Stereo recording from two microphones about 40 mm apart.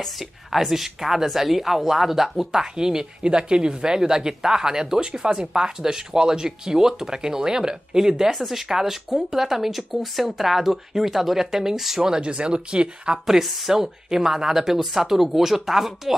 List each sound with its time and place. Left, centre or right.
0.5 s speech: centre; by 13.2 s right
13.3 s speech: centre